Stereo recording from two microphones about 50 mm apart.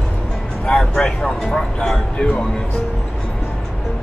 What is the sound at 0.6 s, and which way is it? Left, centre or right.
A man's voice, centre.